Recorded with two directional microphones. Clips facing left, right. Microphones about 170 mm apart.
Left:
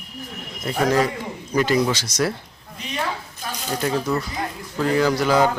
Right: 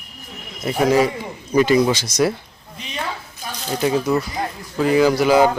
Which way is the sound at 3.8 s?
10° right (ahead or behind).